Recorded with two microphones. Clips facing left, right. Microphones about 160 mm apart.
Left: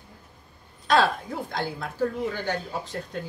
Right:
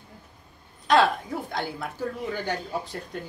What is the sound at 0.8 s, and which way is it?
A woman's voice, 20° right (ahead or behind).